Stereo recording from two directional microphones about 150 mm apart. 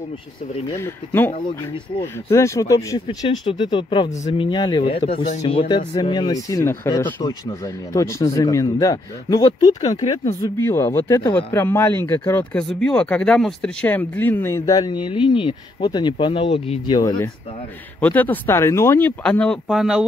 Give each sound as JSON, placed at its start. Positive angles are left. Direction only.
{"t": 0.7, "sound": "speech", "side_deg": 15}
{"t": 3.1, "sound": "speech", "side_deg": 30}
{"t": 5.3, "sound": "speech", "side_deg": 45}
{"t": 7.2, "sound": "speech", "side_deg": 25}
{"t": 16.9, "sound": "speech", "side_deg": 30}
{"t": 18.0, "sound": "speech", "side_deg": 10}